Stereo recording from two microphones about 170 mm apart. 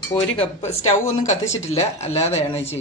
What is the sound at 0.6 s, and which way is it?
Speech, 40° left (ahead or behind).